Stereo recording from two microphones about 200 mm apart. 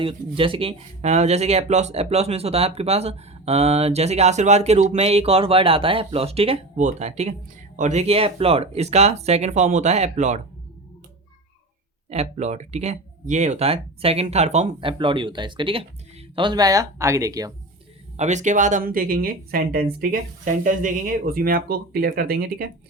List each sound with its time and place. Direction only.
0.0 s speech: 25° right (ahead or behind)
12.1 s speech: 35° right (ahead or behind); by 17.5 s 15° right (ahead or behind)
18.2 s speech: 35° right (ahead or behind)